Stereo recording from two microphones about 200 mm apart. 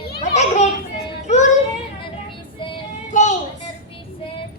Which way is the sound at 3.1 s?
35° left (ahead or behind).